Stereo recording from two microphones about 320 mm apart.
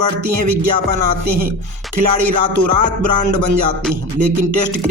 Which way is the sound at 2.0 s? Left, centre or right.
Right.